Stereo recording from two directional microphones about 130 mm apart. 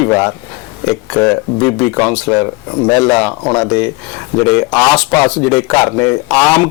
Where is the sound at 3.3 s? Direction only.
25° left (ahead or behind).